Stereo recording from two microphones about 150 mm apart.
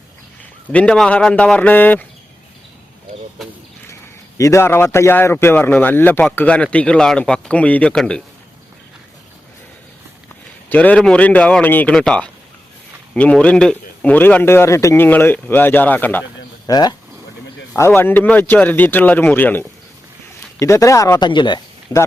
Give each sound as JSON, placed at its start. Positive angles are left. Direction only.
{"t": 0.7, "sound": "a man's voice", "side_deg": 5}
{"t": 4.4, "sound": "a man's voice", "side_deg": 20}
{"t": 10.7, "sound": "a man's voice", "side_deg": 10}
{"t": 16.6, "sound": "speech", "side_deg": 25}
{"t": 17.7, "sound": "a man's voice", "side_deg": 15}